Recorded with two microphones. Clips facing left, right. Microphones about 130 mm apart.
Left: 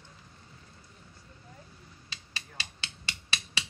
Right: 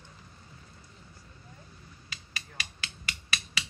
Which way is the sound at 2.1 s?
30° left (ahead or behind).